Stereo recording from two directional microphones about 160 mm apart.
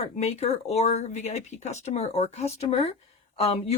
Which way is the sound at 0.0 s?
40° left (ahead or behind).